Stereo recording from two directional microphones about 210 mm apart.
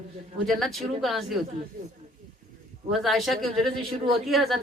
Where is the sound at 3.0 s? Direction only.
Centre (ahead or behind).